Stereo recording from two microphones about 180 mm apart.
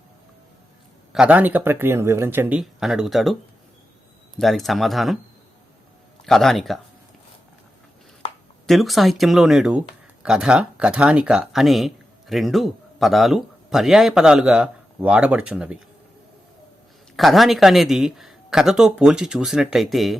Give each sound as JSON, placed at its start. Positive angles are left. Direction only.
{"t": 1.1, "sound": "speech", "side_deg": -5}
{"t": 4.4, "sound": "speech", "side_deg": 0}
{"t": 6.2, "sound": "speech", "side_deg": 0}
{"t": 8.6, "sound": "speech", "side_deg": 0}
{"t": 17.2, "sound": "speech", "side_deg": 0}